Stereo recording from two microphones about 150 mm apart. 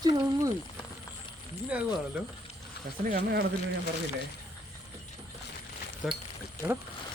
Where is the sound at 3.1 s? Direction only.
70° right (ahead or behind).